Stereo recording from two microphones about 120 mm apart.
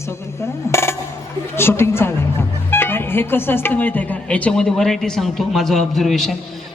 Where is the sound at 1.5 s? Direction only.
20° left (ahead or behind).